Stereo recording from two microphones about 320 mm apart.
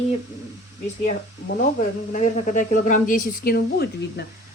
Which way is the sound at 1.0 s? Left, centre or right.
Left.